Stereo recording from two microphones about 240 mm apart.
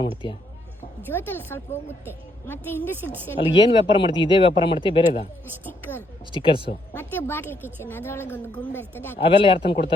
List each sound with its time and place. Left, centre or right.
0.2 s speech: centre
1.0 s a woman's voice: centre
3.0 s a woman's voice: centre
3.2 s speech: centre
5.6 s a woman's voice: centre
6.3 s speech: left
6.9 s a woman's voice: centre
9.1 s speech: left